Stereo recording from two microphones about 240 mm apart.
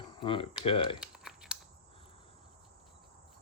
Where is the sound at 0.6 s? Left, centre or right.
Left.